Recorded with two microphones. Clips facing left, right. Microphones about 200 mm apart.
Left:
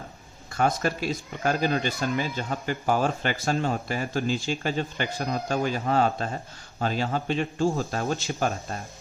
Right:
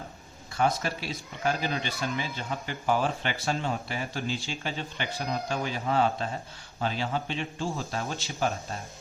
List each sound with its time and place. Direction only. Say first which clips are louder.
0.5 s speech: left 3 dB; 50° left (ahead or behind)